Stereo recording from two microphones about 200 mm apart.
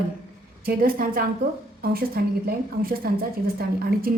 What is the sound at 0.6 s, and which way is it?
A woman's voice, 45° right (ahead or behind).